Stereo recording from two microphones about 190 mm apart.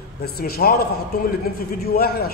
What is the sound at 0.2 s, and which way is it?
A man's voice, 55° left (ahead or behind).